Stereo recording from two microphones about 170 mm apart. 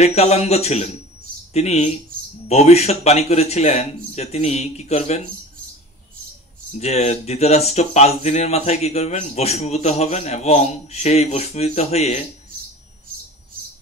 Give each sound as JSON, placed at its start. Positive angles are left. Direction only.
{"t": 0.0, "sound": "speech", "side_deg": 40}
{"t": 6.7, "sound": "speech", "side_deg": 40}